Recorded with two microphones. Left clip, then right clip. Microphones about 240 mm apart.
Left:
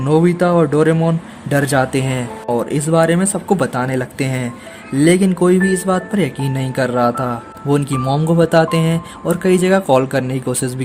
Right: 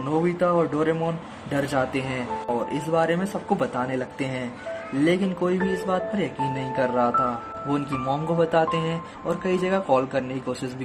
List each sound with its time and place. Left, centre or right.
0.3 s speech: left